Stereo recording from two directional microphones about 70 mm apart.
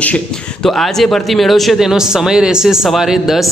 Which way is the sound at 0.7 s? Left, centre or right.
Centre.